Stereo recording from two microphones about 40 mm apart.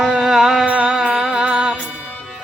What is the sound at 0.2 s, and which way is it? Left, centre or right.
Music, centre.